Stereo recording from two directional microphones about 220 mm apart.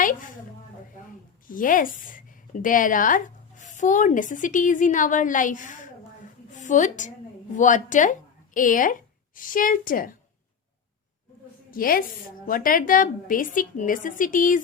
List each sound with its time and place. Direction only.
0.0 s a woman's voice: 35° left (ahead or behind)
1.5 s a woman's voice: 40° left (ahead or behind)
11.7 s a woman's voice: 40° left (ahead or behind)